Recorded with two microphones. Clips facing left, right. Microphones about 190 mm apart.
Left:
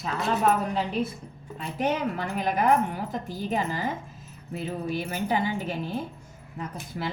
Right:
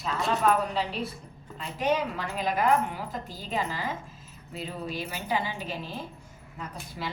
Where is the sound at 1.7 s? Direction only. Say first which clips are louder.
Even; 50° left (ahead or behind).